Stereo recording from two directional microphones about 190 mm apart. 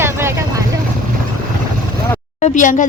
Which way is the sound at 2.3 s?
40° left (ahead or behind).